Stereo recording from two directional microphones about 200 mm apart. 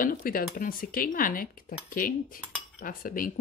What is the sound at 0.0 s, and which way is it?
Cutlery, 45° left (ahead or behind).